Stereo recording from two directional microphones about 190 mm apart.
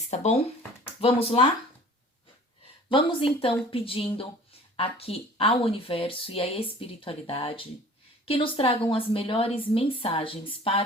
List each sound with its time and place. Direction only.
0.1 s speech: 35° left (ahead or behind)
2.9 s speech: 30° left (ahead or behind)